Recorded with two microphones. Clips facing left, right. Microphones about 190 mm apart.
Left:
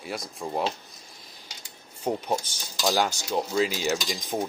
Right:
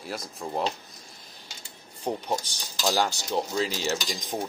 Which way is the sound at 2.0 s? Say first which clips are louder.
Left 2 dB; 10° left (ahead or behind).